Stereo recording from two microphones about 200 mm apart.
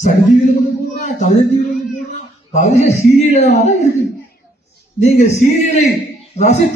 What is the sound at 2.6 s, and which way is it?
Speech, 35° left (ahead or behind).